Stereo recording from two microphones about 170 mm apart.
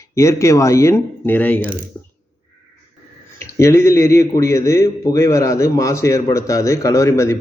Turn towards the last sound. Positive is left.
turn(degrees=15)  # may be behind; listen again after turning